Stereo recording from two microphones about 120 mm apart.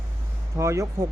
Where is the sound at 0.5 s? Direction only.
25° right (ahead or behind).